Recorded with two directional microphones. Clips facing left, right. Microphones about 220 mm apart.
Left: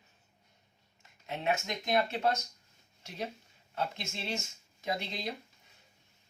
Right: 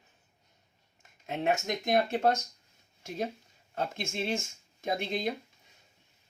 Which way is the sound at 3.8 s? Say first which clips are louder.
Right 4 dB; 50° right (ahead or behind).